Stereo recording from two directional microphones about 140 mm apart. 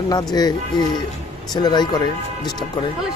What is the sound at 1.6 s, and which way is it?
Speech, 30° left (ahead or behind).